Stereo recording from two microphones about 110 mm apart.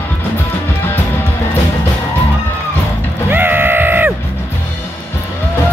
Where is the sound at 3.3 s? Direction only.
20° right (ahead or behind).